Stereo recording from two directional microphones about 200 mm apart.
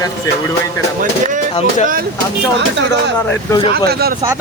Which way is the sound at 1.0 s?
40° right (ahead or behind).